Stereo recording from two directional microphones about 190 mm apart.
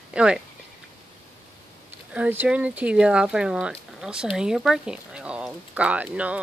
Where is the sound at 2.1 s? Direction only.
10° right (ahead or behind).